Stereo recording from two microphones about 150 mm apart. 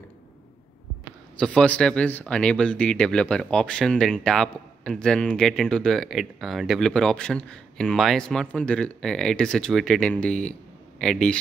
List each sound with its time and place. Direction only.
1.4 s speech: 5° left (ahead or behind)